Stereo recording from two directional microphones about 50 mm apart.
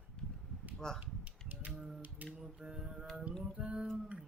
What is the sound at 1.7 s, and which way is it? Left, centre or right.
Speech, centre.